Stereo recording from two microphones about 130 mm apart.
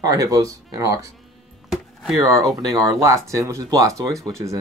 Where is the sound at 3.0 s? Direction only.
25° right (ahead or behind).